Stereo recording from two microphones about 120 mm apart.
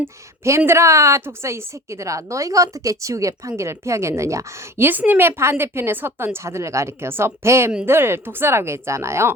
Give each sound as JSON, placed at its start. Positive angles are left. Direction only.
{"t": 0.0, "sound": "a woman's voice", "side_deg": -20}